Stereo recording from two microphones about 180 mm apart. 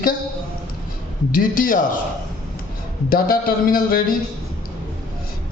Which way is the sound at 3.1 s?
55° left (ahead or behind).